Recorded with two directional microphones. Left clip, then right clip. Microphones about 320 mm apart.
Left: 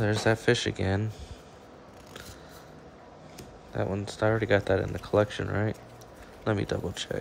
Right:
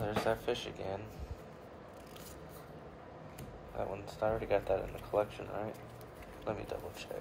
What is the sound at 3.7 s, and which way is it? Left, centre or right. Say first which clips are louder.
Speech: left 8 dB; left.